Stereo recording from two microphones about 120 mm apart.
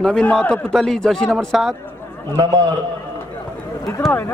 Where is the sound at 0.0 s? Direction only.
10° left (ahead or behind).